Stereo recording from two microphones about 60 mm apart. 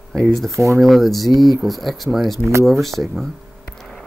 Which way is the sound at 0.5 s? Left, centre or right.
Right.